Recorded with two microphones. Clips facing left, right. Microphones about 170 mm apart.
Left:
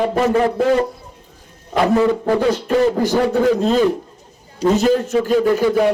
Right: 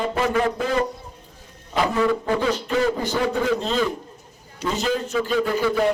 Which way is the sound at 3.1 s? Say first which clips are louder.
Left 6 dB; 45° left (ahead or behind).